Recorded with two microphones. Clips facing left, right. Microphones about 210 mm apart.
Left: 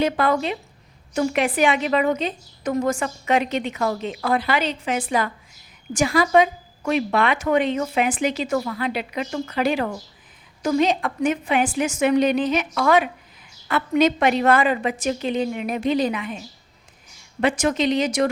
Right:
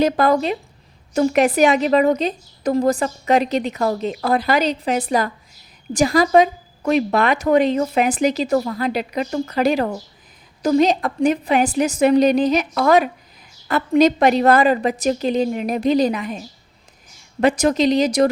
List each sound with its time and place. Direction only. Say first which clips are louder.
0.0 s a woman's voice: right 4 dB; 40° right (ahead or behind)
17.4 s a woman's voice: right 4 dB; 40° right (ahead or behind)